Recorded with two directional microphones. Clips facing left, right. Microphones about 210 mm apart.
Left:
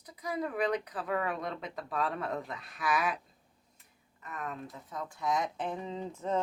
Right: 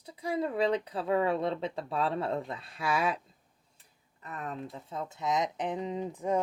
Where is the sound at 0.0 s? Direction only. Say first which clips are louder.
Right 4 dB; 30° right (ahead or behind).